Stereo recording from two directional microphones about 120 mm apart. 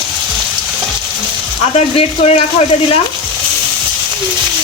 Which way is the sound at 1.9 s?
65° left (ahead or behind).